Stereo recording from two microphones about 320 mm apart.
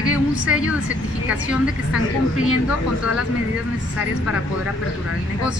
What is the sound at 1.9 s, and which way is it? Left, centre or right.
Speech, left.